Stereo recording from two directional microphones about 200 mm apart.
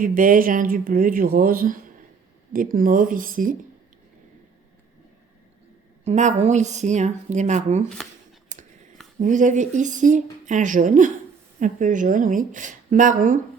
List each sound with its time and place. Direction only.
0.0 s speech: 45° right (ahead or behind)
6.1 s speech: 35° right (ahead or behind)
8.5 s whispering: 40° right (ahead or behind)
9.1 s speech: 40° right (ahead or behind)